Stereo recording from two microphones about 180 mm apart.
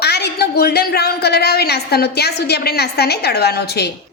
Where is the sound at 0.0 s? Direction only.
65° left (ahead or behind).